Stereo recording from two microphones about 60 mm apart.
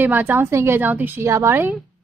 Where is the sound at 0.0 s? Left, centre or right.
Right.